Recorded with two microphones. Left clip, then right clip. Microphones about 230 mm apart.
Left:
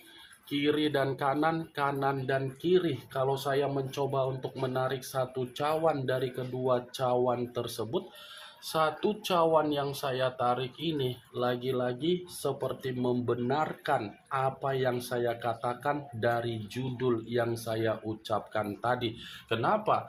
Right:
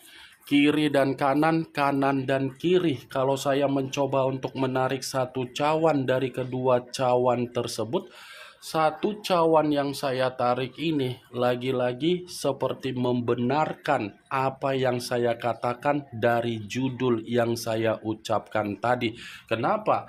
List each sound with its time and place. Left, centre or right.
0.5 s speech: right